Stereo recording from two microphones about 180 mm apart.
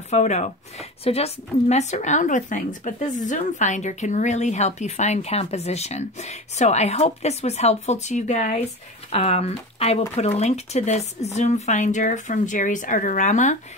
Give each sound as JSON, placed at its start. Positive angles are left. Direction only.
{"t": 0.1, "sound": "speech", "side_deg": 40}